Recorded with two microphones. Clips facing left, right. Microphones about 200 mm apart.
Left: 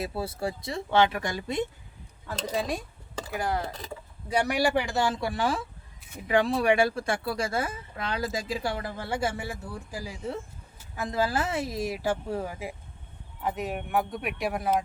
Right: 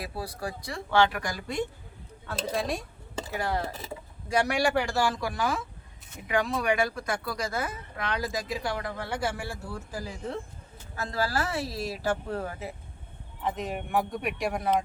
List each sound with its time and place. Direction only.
0.0 s speech: 25° left (ahead or behind)
2.2 s speech: 10° left (ahead or behind)
4.9 s speech: 25° left (ahead or behind)
9.9 s speech: 10° left (ahead or behind)
10.9 s speech: 20° left (ahead or behind); by 14.8 s 5° left (ahead or behind)